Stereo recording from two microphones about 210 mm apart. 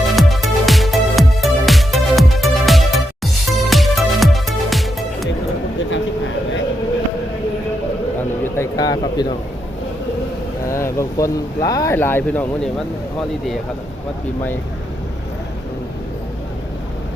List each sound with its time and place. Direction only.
0.0 s music: centre (ahead or behind)
8.5 s a sound: 15° left (ahead or behind)
10.7 s speech: 15° left (ahead or behind)